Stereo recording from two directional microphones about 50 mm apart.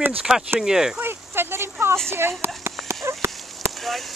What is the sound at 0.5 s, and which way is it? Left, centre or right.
Speech, centre.